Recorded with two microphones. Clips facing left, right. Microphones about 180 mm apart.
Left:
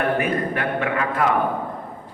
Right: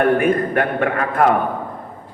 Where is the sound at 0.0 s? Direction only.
50° right (ahead or behind).